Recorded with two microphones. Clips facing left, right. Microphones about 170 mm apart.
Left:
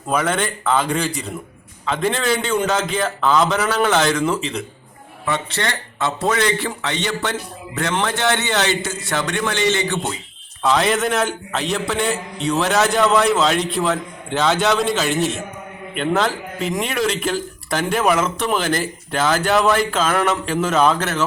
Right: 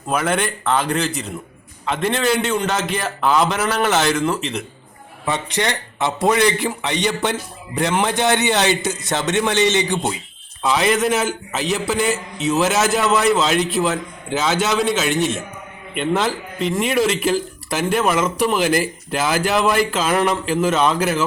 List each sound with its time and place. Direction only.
0.1 s a man's voice: 5° right (ahead or behind)
5.2 s a man's voice: 15° right (ahead or behind)
10.6 s a man's voice: centre (ahead or behind)